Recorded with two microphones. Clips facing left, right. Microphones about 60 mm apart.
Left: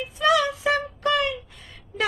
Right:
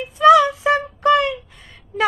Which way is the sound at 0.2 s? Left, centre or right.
Centre.